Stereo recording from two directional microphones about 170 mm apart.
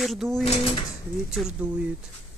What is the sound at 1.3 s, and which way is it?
Speech, 5° right (ahead or behind).